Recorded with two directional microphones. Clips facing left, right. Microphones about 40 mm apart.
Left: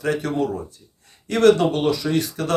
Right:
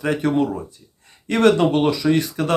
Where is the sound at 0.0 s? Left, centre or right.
Right.